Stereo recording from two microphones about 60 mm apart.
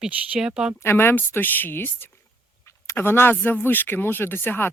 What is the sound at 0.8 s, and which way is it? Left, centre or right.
Speech, left.